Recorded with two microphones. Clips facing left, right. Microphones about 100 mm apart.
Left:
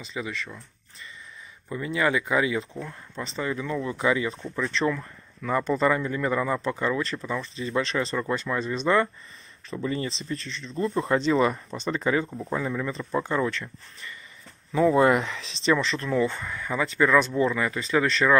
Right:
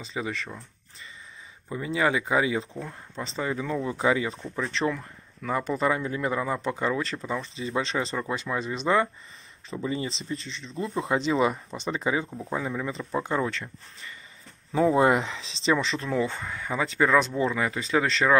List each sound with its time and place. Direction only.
0.0 s speech: 35° right (ahead or behind)
1.7 s speech: 25° right (ahead or behind)
5.5 s speech: 10° right (ahead or behind)
10.8 s speech: 5° right (ahead or behind)
12.3 s speech: centre (ahead or behind)
12.5 s speech: 15° right (ahead or behind)